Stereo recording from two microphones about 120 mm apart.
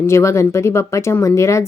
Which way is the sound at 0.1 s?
25° left (ahead or behind).